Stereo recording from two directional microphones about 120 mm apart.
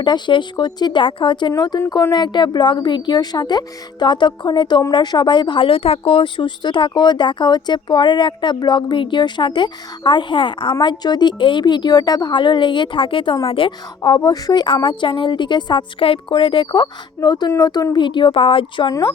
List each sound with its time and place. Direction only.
0.0 s speech: 40° left (ahead or behind)